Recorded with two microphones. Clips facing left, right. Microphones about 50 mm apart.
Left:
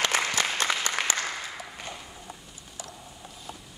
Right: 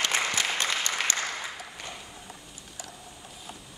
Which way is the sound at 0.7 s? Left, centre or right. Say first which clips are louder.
Left 2 dB; left.